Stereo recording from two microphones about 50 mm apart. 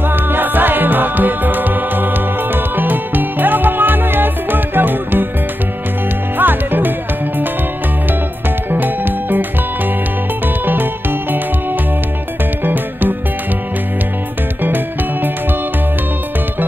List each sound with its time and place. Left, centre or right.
0.1 s music: right
6.3 s music: right
8.6 s music: right
12.6 s music: right